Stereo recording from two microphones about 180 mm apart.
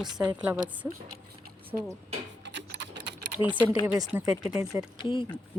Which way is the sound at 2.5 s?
80° right.